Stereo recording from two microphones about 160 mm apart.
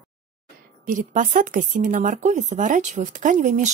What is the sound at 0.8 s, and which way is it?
Speech, 55° right (ahead or behind).